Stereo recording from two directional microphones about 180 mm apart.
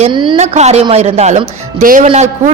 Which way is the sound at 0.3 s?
40° right (ahead or behind).